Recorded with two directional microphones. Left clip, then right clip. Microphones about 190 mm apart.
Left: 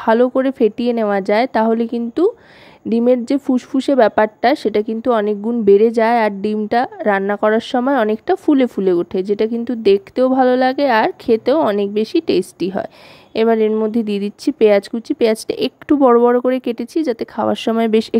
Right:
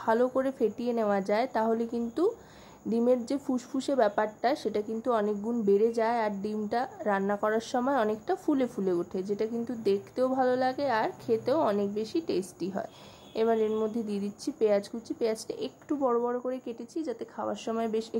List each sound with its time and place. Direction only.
0.0 s speech: 35° left (ahead or behind)